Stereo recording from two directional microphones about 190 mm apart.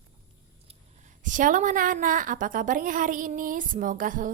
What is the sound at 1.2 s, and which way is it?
A woman's voice, 45° right (ahead or behind).